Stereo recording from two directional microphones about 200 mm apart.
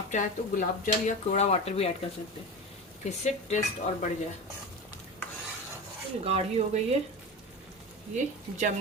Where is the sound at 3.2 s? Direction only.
35° left (ahead or behind).